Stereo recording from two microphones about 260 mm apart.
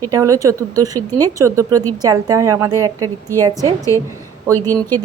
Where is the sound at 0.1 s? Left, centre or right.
Centre.